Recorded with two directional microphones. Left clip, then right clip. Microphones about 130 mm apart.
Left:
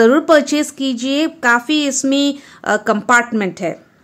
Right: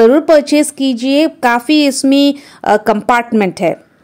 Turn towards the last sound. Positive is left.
turn(degrees=-50)  # may be behind; listen again after turning